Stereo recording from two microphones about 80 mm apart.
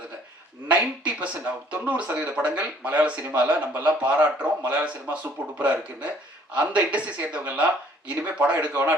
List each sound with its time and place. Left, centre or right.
0.7 s speech: centre